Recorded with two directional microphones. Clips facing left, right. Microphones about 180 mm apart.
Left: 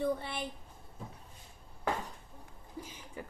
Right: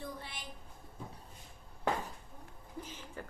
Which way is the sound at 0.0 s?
60° left (ahead or behind).